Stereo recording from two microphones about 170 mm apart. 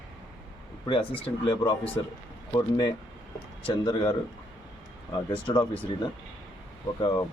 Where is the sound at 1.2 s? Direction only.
30° left (ahead or behind).